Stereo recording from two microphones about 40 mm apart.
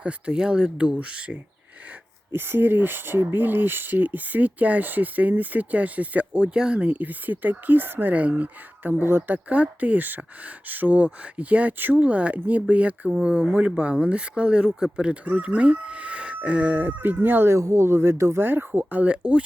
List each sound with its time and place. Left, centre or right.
0.0 s speech: right
2.3 s speech: right
8.1 s speech: right
9.0 s speech: right
9.3 s speech: right
16.7 s speech: right
17.2 s speech: right
18.7 s speech: right
19.0 s speech: right